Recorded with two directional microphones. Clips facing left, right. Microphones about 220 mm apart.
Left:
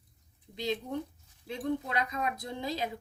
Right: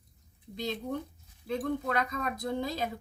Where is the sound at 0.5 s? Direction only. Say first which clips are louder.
Left 1 dB; 50° right (ahead or behind).